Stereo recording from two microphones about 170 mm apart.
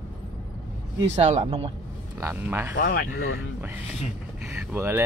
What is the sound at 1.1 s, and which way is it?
Speech, 40° right (ahead or behind).